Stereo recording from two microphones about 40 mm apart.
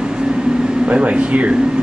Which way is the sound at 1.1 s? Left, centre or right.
Right.